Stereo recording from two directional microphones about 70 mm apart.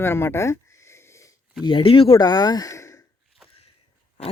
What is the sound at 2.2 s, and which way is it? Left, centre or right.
Speech, left.